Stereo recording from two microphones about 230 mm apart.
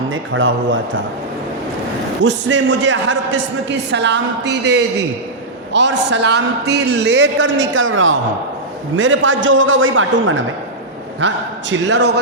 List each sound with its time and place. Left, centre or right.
0.1 s a man's voice: right
2.2 s a man's voice: right
11.9 s a man's voice: right